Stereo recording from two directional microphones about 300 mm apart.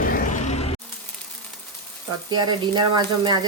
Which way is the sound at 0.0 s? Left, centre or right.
Left.